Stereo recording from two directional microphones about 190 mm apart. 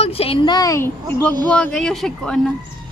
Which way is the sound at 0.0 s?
30° left (ahead or behind).